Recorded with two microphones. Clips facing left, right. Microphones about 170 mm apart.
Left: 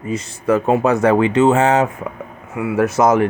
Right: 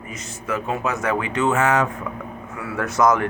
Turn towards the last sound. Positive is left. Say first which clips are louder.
# left 5 dB
turn(degrees=25)  # may be behind; listen again after turning